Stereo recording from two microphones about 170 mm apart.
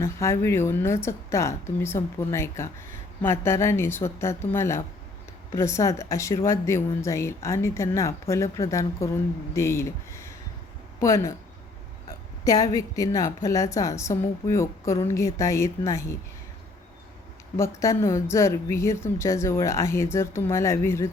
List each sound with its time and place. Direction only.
0.0 s a woman's voice: 15° left (ahead or behind)
12.5 s a woman's voice: 20° left (ahead or behind)
17.6 s a woman's voice: 20° left (ahead or behind)